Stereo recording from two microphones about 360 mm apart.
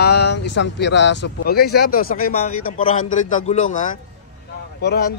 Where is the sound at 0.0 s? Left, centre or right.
Left.